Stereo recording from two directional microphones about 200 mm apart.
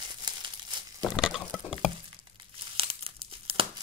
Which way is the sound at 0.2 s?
20° right (ahead or behind).